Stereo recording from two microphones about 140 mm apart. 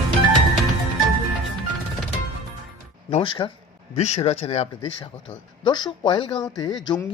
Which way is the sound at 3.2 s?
35° left (ahead or behind).